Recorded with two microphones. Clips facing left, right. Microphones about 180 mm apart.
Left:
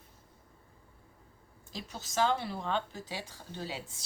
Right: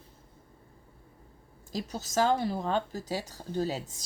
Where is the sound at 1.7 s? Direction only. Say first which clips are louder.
Right 6 dB; 40° right (ahead or behind).